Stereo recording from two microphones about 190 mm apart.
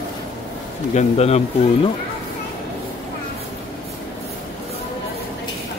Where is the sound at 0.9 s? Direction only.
35° left (ahead or behind).